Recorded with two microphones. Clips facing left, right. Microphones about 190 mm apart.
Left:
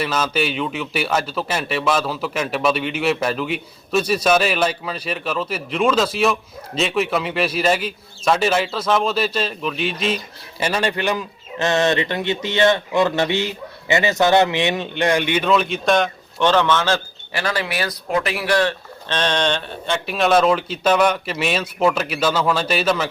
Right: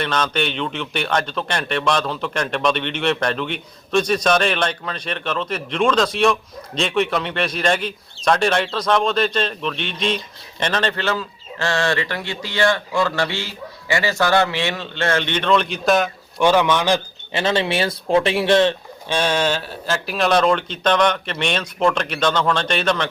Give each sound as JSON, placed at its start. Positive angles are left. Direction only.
{"t": 0.0, "sound": "a man's voice", "side_deg": 5}
{"t": 19.0, "sound": "a man's voice", "side_deg": -10}